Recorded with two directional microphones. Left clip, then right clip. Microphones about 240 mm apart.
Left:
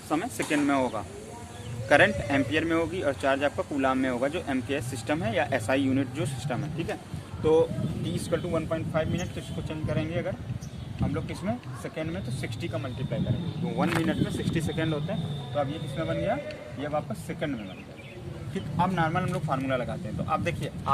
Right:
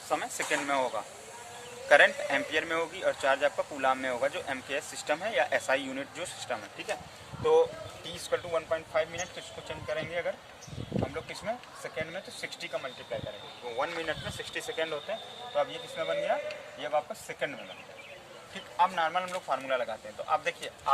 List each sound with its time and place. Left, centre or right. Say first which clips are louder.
0.1 s speech: left 2 dB; centre